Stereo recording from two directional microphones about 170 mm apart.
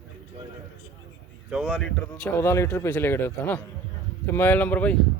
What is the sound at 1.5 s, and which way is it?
Speech, 5° left (ahead or behind).